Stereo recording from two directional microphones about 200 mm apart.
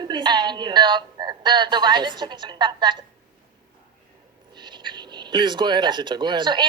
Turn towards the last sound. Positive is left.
turn(degrees=-25)  # may be behind; listen again after turning